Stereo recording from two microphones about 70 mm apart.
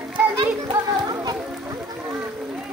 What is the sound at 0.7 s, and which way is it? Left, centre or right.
Music, right.